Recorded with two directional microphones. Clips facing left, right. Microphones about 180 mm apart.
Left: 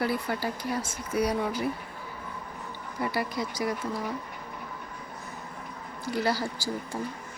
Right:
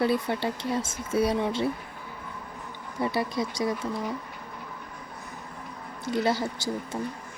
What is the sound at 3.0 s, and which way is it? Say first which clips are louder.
Speech: right 3 dB; 25° right (ahead or behind).